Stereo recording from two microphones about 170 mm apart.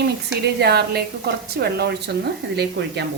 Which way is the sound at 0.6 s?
70° right (ahead or behind).